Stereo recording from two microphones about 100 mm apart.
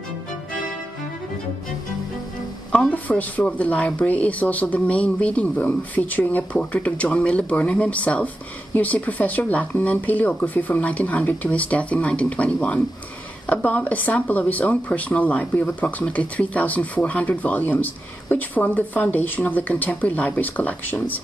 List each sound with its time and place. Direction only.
2.7 s speech: 10° left (ahead or behind)